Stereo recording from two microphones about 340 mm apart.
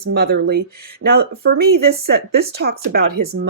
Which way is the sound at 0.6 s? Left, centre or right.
Right.